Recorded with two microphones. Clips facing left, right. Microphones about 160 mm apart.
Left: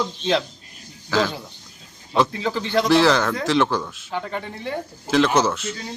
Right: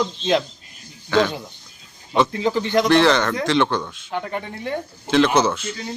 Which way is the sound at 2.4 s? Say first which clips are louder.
Right 3 dB; 15° right (ahead or behind).